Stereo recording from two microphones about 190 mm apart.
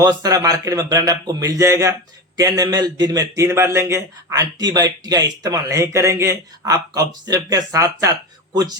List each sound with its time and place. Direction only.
0.0 s a man's voice: 20° right (ahead or behind)